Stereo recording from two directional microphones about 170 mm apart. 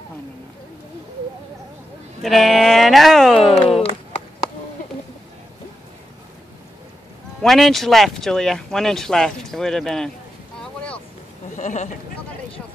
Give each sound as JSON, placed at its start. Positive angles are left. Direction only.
{"t": 2.2, "sound": "speech", "side_deg": 0}
{"t": 7.4, "sound": "speech", "side_deg": 0}
{"t": 10.6, "sound": "boat", "side_deg": 5}
{"t": 11.5, "sound": "speech", "side_deg": 45}